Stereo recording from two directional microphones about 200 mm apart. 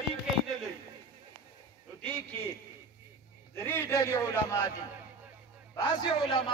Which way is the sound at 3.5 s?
10° left (ahead or behind).